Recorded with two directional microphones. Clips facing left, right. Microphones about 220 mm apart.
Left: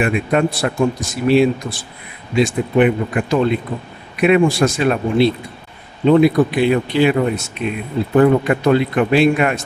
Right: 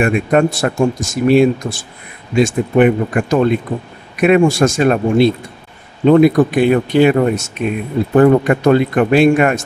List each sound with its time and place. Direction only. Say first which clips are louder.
0.0 s speech: right 3 dB; 45° right (ahead or behind)